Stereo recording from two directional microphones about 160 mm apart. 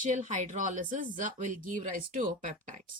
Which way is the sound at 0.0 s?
50° right (ahead or behind).